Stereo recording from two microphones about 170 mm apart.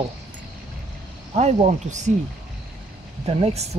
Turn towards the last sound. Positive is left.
turn(degrees=-35)  # may be behind; listen again after turning